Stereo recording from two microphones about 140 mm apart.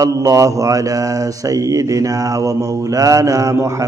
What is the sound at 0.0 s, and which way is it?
Mantra, 25° right (ahead or behind).